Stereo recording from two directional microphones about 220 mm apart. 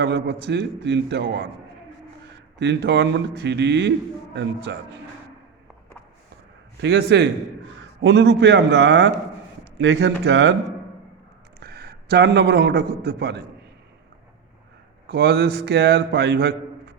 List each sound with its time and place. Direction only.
0.0 s a man's voice: 50° right (ahead or behind)
2.6 s a man's voice: 50° right (ahead or behind)
6.8 s a man's voice: 50° right (ahead or behind)
11.6 s a man's voice: 45° right (ahead or behind)
15.0 s a man's voice: 50° right (ahead or behind)